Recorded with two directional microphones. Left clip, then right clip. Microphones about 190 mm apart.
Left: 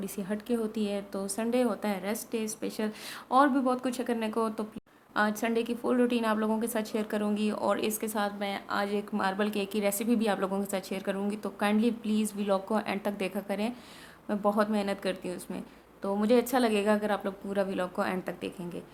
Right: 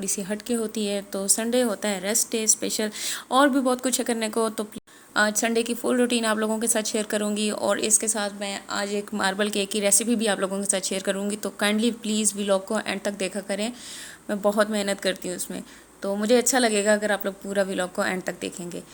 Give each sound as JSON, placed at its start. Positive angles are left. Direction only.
{"t": 0.0, "sound": "a woman's voice", "side_deg": -15}